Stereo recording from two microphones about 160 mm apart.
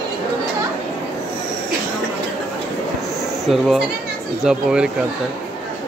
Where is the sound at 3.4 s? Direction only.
Centre (ahead or behind).